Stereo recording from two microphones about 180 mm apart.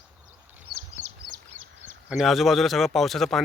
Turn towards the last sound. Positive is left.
turn(degrees=0)  # may be behind; listen again after turning